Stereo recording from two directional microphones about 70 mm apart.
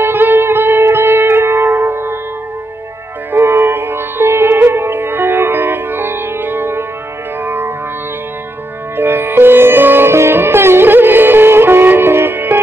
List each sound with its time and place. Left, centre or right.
0.0 s music: right
3.3 s music: right
8.9 s music: right